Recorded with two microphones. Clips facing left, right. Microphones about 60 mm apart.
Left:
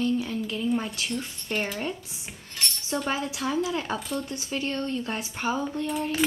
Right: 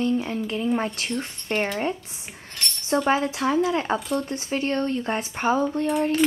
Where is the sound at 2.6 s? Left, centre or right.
Centre.